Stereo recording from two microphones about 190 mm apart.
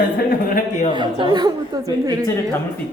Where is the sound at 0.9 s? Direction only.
25° right (ahead or behind).